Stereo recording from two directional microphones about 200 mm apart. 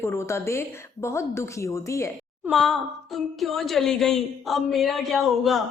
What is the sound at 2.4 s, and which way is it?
A woman's voice, centre (ahead or behind).